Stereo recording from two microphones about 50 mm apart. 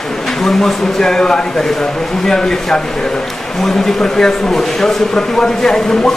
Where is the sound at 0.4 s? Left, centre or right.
Centre.